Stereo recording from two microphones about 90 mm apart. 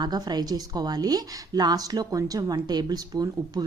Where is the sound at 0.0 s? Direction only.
50° right (ahead or behind).